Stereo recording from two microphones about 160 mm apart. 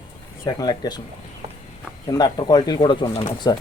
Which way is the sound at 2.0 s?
25° left (ahead or behind).